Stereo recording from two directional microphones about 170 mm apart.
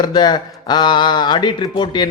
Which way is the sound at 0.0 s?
25° left (ahead or behind).